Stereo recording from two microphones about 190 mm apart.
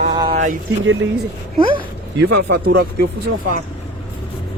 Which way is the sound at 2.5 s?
60° right (ahead or behind).